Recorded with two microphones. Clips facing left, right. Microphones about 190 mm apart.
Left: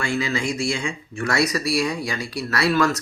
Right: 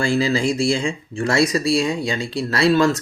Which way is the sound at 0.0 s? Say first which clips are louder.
Right 6 dB; 30° right (ahead or behind).